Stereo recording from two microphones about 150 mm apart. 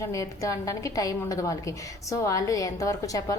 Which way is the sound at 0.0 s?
20° left (ahead or behind).